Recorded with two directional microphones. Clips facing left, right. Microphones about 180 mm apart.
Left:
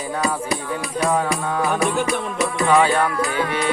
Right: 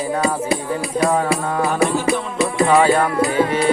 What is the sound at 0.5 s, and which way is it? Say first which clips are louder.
Music: right 4 dB; 30° right (ahead or behind).